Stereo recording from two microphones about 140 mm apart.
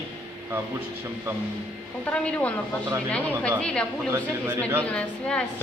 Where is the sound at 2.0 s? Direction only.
10° left (ahead or behind).